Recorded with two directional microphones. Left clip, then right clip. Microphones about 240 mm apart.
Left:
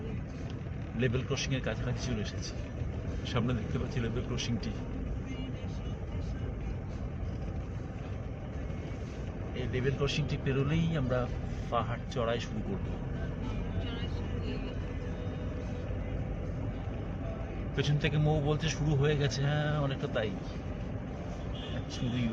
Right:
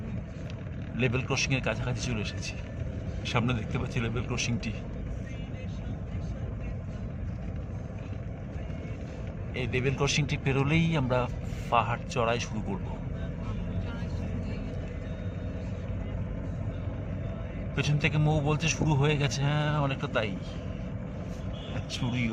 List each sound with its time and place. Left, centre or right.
0.9 s a man's voice: right
3.2 s a man's voice: right
9.7 s a man's voice: right
17.7 s a man's voice: centre